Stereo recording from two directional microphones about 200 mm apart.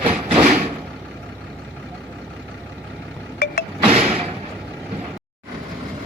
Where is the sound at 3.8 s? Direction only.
35° right (ahead or behind).